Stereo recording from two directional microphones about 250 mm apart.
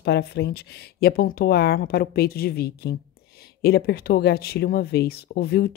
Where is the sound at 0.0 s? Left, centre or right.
Left.